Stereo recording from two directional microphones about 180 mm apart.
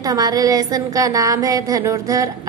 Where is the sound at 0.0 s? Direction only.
20° right (ahead or behind).